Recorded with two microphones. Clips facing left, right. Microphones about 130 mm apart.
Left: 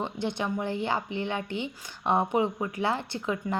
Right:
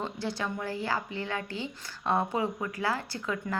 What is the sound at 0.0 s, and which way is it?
A woman's voice, 20° left (ahead or behind).